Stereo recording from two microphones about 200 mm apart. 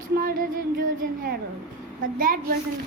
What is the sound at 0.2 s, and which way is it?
Music, 45° right (ahead or behind).